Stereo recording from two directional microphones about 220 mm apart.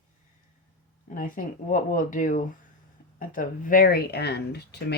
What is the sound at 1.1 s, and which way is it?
Speech, 35° left (ahead or behind).